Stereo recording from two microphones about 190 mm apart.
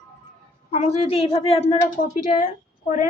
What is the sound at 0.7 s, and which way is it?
A woman's voice, 35° left (ahead or behind).